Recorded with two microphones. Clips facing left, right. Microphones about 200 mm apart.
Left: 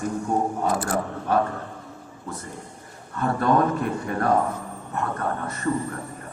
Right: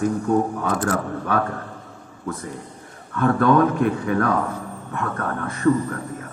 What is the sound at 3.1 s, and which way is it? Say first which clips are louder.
A man's voice: right 4 dB; 80° right.